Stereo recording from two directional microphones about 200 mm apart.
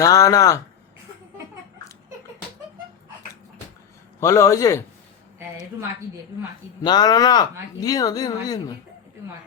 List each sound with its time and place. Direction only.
0.0 s speech: 15° left (ahead or behind)
4.2 s speech: 15° left (ahead or behind)
6.8 s speech: 20° left (ahead or behind)